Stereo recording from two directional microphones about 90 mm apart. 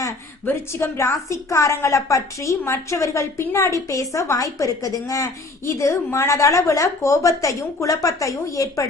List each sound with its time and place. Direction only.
0.4 s a woman's voice: 30° left (ahead or behind)